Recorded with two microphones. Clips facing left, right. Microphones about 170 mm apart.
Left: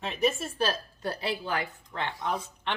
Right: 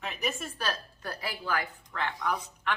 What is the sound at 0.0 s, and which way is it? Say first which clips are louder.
A woman's voice: left 6 dB; 30° left (ahead or behind).